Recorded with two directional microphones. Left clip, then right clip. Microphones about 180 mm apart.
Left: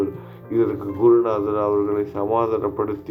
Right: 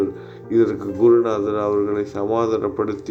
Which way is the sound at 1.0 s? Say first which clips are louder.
Right 1 dB; 25° right (ahead or behind).